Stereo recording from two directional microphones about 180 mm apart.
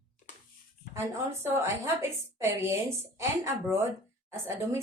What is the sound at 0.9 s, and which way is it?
A woman's voice, 10° right (ahead or behind).